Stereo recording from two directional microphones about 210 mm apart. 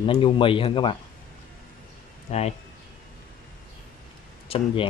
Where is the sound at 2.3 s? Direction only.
30° left (ahead or behind).